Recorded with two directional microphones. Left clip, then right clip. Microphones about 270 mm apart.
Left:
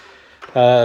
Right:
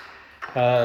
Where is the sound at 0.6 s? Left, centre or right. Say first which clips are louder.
Left 7 dB; left.